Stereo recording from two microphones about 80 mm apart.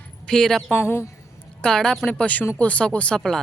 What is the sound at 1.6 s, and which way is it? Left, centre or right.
Speech, centre.